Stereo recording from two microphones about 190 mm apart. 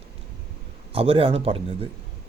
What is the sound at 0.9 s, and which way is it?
Speech, 30° right (ahead or behind).